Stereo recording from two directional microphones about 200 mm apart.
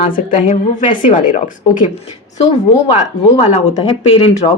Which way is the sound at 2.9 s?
35° left (ahead or behind).